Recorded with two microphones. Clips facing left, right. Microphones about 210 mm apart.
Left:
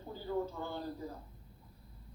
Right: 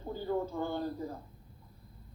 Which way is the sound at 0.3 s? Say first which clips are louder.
Right 3 dB; 50° right (ahead or behind).